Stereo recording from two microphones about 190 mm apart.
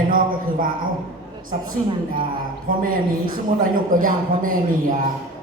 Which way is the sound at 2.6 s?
45° right (ahead or behind).